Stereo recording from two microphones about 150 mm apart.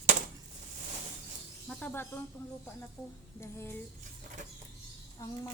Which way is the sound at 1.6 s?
10° left (ahead or behind).